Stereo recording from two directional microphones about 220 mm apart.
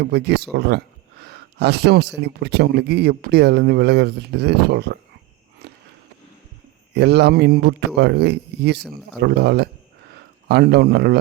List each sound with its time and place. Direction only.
0.0 s speech: 50° right (ahead or behind)
5.6 s a sound: 50° right (ahead or behind)
6.9 s a man's voice: 50° right (ahead or behind)